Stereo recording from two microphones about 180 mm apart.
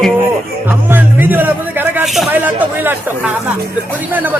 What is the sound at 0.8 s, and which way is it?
Music, 10° right (ahead or behind).